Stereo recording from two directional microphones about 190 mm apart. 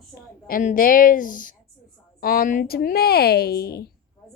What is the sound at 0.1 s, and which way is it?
A woman's voice, 50° left (ahead or behind).